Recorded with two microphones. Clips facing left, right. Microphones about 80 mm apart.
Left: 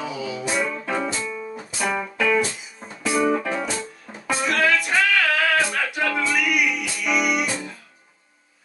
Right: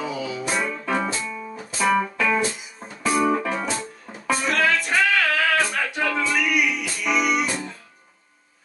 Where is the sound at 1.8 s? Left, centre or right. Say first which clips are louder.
Right 3 dB; right.